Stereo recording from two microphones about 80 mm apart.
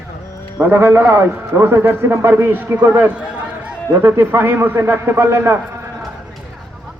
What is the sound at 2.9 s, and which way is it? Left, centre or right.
Speech, centre.